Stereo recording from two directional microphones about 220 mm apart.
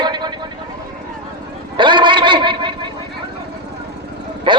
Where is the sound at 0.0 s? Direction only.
20° right (ahead or behind).